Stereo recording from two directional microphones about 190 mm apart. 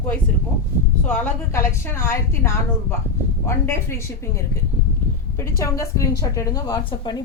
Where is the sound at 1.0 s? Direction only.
10° left (ahead or behind).